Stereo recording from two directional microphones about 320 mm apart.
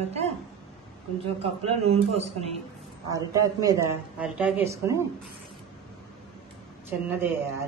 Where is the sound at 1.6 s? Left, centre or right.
Centre.